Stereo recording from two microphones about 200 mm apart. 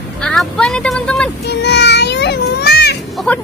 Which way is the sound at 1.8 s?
55° left (ahead or behind).